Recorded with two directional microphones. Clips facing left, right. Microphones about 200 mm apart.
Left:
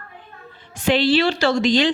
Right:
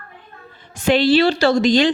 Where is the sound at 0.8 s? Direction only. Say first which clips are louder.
Right 3 dB; 45° right (ahead or behind).